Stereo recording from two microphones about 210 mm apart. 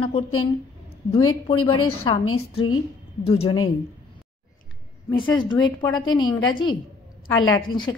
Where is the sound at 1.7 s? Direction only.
90° left.